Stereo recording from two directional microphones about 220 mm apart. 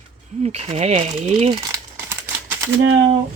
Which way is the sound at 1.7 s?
10° right (ahead or behind).